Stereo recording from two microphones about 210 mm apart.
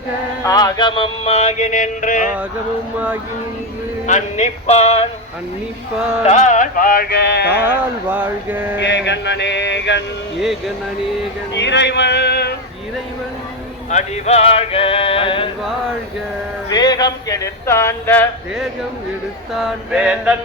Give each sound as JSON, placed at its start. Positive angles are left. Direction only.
{"t": 0.4, "sound": "music", "side_deg": 15}
{"t": 4.0, "sound": "music", "side_deg": 35}
{"t": 6.2, "sound": "music", "side_deg": 35}
{"t": 8.1, "sound": "mantra", "side_deg": -10}
{"t": 8.8, "sound": "a sound", "side_deg": 55}
{"t": 11.5, "sound": "speech", "side_deg": 55}
{"t": 13.9, "sound": "music", "side_deg": 30}
{"t": 16.6, "sound": "a sound", "side_deg": 20}
{"t": 19.5, "sound": "music", "side_deg": 0}